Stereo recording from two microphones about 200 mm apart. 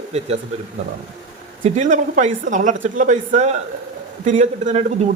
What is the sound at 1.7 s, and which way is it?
Speech, 40° right (ahead or behind).